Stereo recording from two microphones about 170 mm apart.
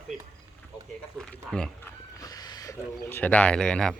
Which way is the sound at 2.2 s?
20° left (ahead or behind).